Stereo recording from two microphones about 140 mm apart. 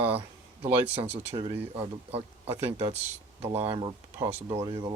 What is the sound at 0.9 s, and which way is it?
Speech, 45° right (ahead or behind).